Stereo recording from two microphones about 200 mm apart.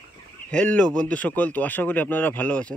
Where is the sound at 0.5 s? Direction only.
5° left (ahead or behind).